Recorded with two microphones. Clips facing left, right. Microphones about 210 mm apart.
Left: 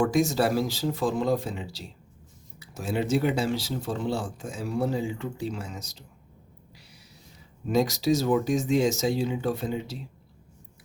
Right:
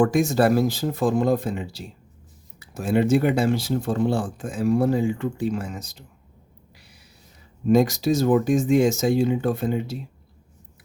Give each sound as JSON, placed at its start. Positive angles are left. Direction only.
{"t": 0.0, "sound": "speech", "side_deg": -55}
{"t": 7.7, "sound": "speech", "side_deg": -50}